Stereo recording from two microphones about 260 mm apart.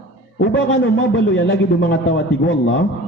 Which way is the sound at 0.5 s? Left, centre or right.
Left.